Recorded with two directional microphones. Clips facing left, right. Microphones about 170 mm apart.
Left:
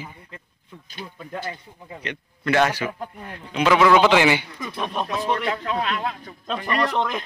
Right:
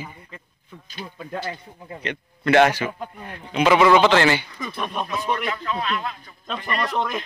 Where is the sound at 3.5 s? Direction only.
5° right (ahead or behind).